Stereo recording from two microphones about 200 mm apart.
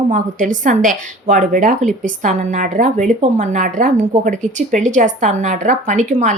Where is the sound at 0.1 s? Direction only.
40° right (ahead or behind).